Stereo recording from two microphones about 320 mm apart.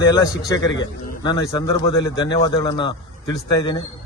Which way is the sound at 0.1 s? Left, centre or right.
Centre.